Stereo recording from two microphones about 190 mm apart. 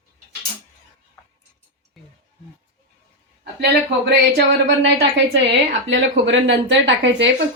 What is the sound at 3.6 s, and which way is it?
Speech, 60° right (ahead or behind).